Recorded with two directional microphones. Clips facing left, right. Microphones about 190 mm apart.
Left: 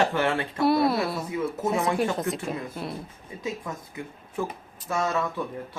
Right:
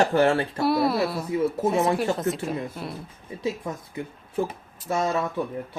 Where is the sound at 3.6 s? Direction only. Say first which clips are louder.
Right 3 dB; 35° right (ahead or behind).